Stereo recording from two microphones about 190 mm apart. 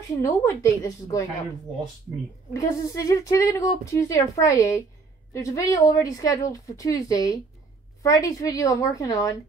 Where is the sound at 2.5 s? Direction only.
15° left (ahead or behind).